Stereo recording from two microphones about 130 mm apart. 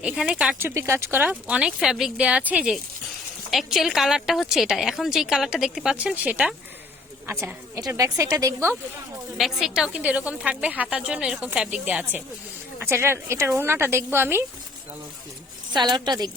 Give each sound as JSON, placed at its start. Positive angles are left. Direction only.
{"t": 0.0, "sound": "a woman's voice", "side_deg": -10}
{"t": 0.7, "sound": "a woman's voice", "side_deg": -20}
{"t": 3.5, "sound": "a woman's voice", "side_deg": 0}
{"t": 7.8, "sound": "speech", "side_deg": -25}
{"t": 9.4, "sound": "a woman's voice", "side_deg": -5}
{"t": 15.7, "sound": "a woman's voice", "side_deg": -35}